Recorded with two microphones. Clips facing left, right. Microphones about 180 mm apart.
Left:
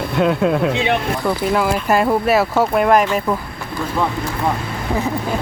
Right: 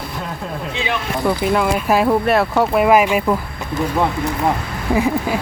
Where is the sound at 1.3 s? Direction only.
Centre (ahead or behind).